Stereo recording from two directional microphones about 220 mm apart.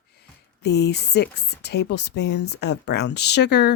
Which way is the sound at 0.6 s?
50° left (ahead or behind).